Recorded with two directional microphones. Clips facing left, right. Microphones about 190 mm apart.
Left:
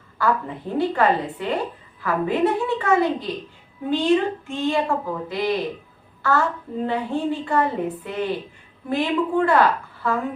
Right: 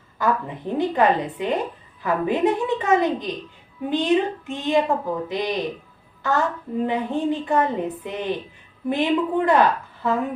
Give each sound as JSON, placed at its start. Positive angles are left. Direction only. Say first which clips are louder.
{"t": 0.2, "sound": "a woman's voice", "louder": "even", "side_deg": -20}